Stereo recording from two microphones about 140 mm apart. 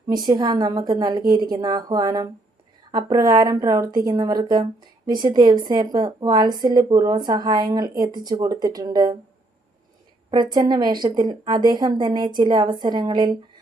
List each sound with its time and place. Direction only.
0.2 s speech: 30° right (ahead or behind)
10.3 s a woman's voice: 30° right (ahead or behind)